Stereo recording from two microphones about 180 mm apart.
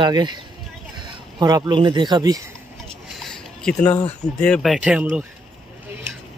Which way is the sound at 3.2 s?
5° left (ahead or behind).